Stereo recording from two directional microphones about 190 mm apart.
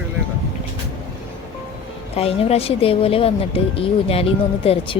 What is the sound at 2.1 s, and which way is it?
Speech, 30° left (ahead or behind).